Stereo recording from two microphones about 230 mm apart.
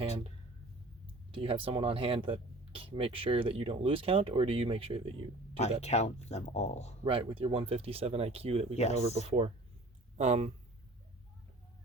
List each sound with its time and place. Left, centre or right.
1.3 s speech: right
5.8 s speech: left
7.0 s speech: right
8.7 s speech: left
9.0 s speech: right